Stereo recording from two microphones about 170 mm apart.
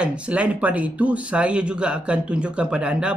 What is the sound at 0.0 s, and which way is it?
Speech, 5° right (ahead or behind).